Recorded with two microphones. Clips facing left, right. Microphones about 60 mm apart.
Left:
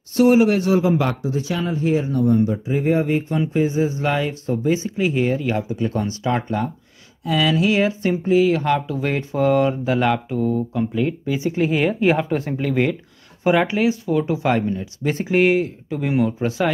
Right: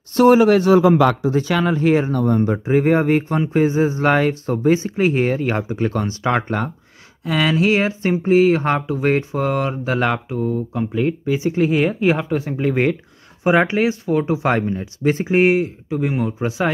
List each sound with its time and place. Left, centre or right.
0.1 s speech: right
7.5 s speech: right
12.0 s speech: centre
12.4 s speech: centre
13.4 s speech: right